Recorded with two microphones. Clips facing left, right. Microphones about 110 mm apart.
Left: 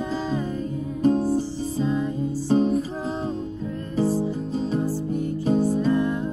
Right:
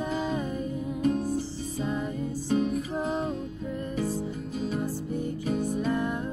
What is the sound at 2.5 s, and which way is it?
Music, 30° left (ahead or behind).